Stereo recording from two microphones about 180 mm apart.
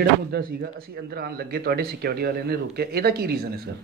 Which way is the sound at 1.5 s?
60° right (ahead or behind).